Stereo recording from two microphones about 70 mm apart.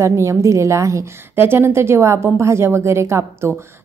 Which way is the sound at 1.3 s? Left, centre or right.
Right.